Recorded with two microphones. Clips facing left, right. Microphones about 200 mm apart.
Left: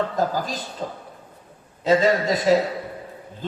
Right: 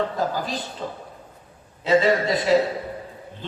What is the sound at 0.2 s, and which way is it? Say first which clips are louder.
A man's voice: left 1 dB; 45° left (ahead or behind).